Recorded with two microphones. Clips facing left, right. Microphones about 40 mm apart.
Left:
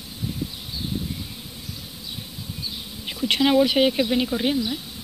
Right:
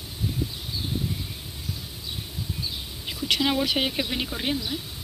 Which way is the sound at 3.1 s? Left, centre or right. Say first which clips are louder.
Left 3 dB; left.